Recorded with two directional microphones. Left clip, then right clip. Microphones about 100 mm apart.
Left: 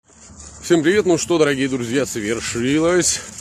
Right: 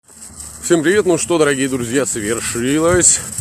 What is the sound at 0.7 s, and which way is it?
Speech, 25° left (ahead or behind).